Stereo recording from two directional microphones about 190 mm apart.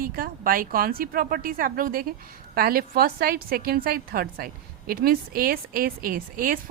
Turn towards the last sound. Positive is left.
turn(degrees=-50)  # may be behind; listen again after turning